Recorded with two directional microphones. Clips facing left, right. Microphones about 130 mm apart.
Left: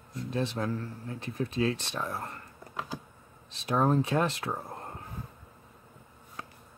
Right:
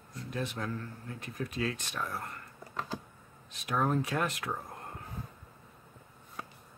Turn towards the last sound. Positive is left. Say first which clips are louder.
# even
turn(degrees=0)  # may be behind; listen again after turning